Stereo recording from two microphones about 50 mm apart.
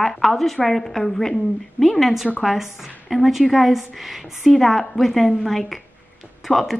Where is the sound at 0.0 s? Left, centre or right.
Centre.